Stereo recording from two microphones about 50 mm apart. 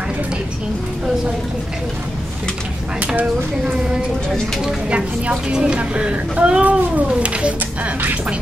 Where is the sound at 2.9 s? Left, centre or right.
Right.